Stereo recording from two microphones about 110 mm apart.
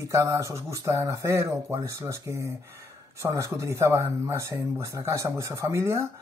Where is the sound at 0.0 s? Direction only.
25° right (ahead or behind).